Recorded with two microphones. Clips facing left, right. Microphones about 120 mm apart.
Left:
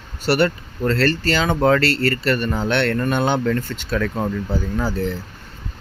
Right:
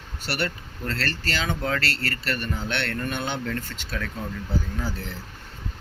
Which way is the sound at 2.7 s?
65° left (ahead or behind).